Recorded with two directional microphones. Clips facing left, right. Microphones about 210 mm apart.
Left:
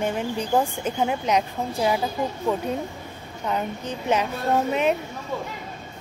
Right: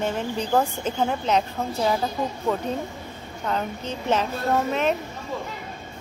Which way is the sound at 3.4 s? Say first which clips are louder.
Even; 15° left (ahead or behind).